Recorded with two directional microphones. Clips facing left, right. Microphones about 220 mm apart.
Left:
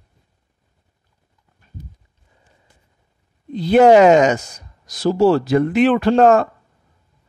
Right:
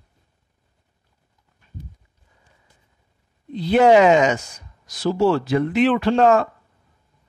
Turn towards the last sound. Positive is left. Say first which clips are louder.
# left 3 dB
turn(degrees=45)  # may be behind; listen again after turning